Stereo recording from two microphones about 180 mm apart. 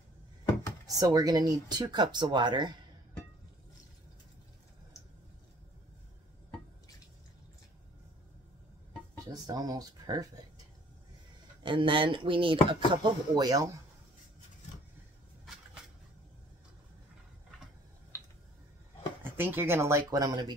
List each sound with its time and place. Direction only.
0.9 s speech: 20° right (ahead or behind)
9.2 s speech: 20° right (ahead or behind)
11.6 s speech: 30° right (ahead or behind)
19.3 s speech: 10° right (ahead or behind)